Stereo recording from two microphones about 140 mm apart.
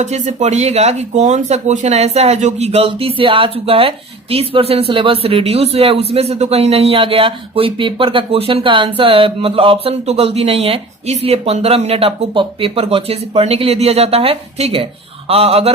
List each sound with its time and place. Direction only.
0.0 s a man's voice: 55° right (ahead or behind)